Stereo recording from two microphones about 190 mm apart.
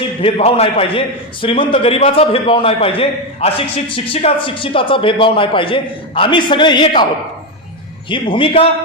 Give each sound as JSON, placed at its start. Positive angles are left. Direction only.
{"t": 0.2, "sound": "a man's voice", "side_deg": 30}
{"t": 8.1, "sound": "a man's voice", "side_deg": 25}